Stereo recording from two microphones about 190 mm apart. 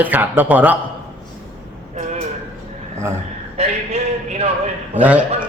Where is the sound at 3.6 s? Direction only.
35° right (ahead or behind).